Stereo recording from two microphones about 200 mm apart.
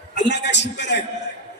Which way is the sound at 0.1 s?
60° left (ahead or behind).